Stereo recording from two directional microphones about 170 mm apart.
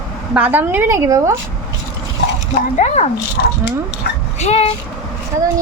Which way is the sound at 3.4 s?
85° left.